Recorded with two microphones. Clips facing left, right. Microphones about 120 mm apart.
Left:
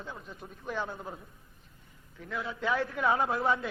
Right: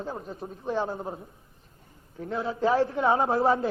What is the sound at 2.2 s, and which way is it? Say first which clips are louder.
A man's voice: right 8 dB; 35° right (ahead or behind).